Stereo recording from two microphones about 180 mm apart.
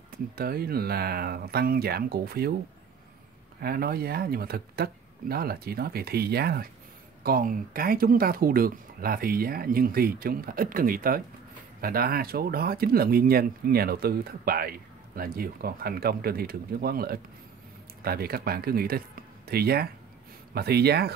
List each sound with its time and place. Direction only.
0.1 s speech: 55° right (ahead or behind)
3.6 s speech: 60° right (ahead or behind)